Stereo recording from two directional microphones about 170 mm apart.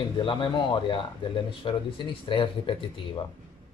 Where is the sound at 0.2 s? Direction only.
30° left (ahead or behind).